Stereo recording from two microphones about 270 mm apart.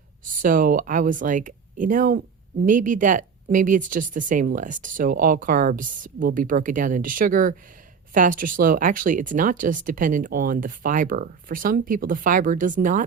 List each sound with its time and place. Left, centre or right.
0.4 s speech: right